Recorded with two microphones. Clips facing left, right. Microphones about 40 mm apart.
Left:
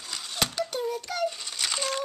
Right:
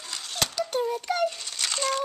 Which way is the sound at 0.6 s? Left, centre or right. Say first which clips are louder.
Right 4 dB; centre.